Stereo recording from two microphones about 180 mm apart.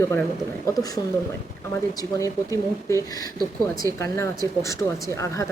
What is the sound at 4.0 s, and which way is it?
Speech, 15° left (ahead or behind).